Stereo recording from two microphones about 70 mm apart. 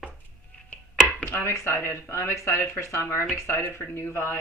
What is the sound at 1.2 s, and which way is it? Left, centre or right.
Speech, left.